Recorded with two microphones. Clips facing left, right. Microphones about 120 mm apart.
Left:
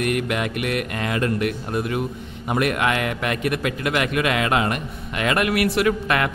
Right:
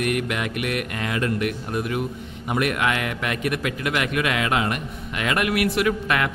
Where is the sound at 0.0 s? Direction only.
30° left (ahead or behind).